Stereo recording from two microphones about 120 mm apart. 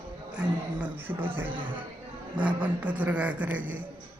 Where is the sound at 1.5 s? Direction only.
45° right (ahead or behind).